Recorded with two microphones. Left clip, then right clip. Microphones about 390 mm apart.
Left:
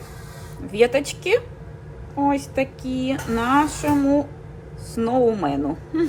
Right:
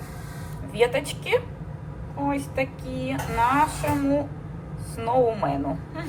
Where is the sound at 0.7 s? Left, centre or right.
Centre.